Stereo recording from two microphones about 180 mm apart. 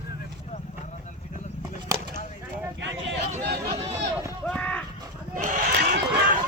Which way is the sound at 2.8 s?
80° right.